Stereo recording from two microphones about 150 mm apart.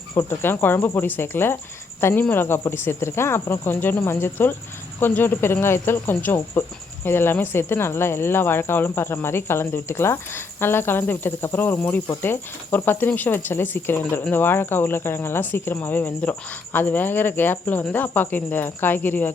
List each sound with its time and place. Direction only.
0.1 s speech: 15° left (ahead or behind)